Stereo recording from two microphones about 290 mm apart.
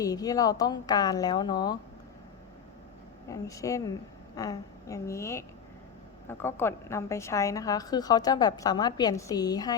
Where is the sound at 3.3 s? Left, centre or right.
Centre.